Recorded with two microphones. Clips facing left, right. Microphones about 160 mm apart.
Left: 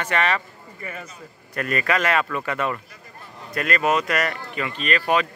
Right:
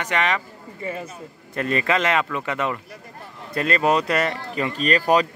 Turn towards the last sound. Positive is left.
turn(degrees=-40)  # may be behind; listen again after turning